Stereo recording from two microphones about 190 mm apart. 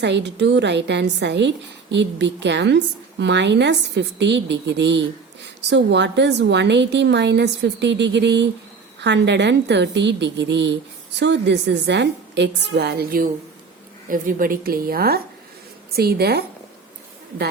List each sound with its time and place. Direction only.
0.0 s a woman's voice: 65° right (ahead or behind)